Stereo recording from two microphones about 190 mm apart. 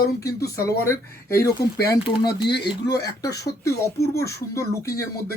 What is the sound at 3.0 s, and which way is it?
Speech, 60° left (ahead or behind).